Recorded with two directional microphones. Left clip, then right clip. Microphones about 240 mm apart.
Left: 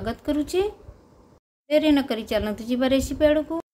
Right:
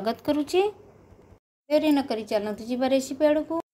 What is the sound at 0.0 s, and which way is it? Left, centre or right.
A woman's voice, centre.